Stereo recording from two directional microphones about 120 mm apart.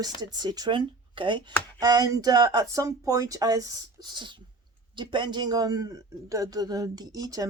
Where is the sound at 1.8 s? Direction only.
30° right (ahead or behind).